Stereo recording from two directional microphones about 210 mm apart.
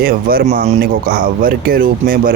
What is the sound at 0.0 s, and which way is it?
Speech, 45° right (ahead or behind).